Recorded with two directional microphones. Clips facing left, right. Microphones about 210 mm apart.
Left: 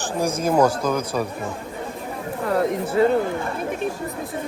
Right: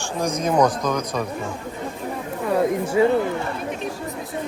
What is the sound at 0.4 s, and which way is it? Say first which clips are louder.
Speech: left 1 dB; 5° left (ahead or behind).